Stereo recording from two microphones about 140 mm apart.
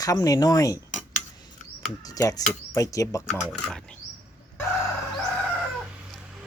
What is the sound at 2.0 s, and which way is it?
Speech, 25° left (ahead or behind).